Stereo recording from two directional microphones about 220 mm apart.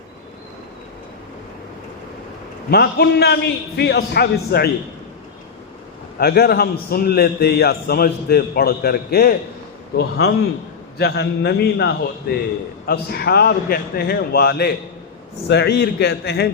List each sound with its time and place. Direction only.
2.6 s a man's voice: 45° left (ahead or behind)
6.1 s a man's voice: 45° left (ahead or behind)